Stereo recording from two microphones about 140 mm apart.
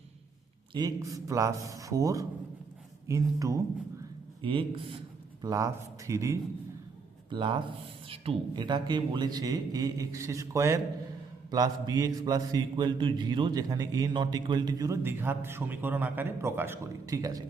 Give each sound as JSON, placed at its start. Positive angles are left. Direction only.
{"t": 0.7, "sound": "mantra", "side_deg": -25}
{"t": 4.4, "sound": "a man's voice", "side_deg": -35}
{"t": 5.4, "sound": "mantra", "side_deg": -25}
{"t": 7.3, "sound": "speech", "side_deg": -35}
{"t": 8.1, "sound": "mantra", "side_deg": -40}